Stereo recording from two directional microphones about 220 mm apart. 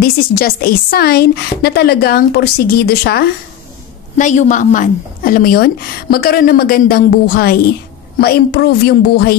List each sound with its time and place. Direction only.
0.0 s speech: 45° left (ahead or behind)
4.2 s a woman's voice: 35° left (ahead or behind)